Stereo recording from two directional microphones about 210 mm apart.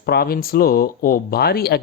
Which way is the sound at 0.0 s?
50° left (ahead or behind).